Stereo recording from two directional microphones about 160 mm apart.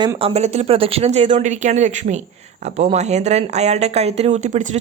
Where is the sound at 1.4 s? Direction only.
50° right (ahead or behind).